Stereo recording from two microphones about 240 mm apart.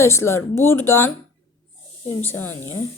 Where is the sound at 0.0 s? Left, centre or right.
Centre.